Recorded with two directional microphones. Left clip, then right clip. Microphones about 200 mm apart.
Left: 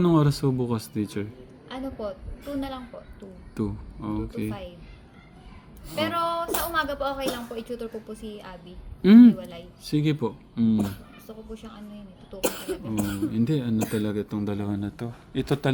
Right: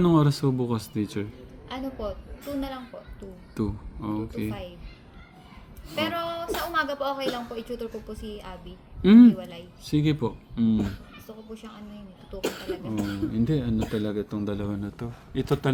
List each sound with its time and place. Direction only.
0.0 s a man's voice: centre (ahead or behind)
6.0 s a man's voice: centre (ahead or behind)
9.0 s speech: 10° left (ahead or behind)
9.4 s a man's voice: 5° right (ahead or behind)
13.0 s speech: 55° left (ahead or behind)
13.3 s speech: 10° left (ahead or behind)